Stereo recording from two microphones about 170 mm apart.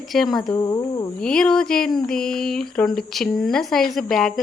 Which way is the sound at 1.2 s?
5° left (ahead or behind).